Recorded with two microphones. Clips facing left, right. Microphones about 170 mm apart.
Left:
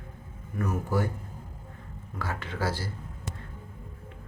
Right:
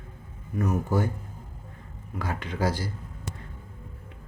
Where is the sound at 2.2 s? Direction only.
15° right (ahead or behind).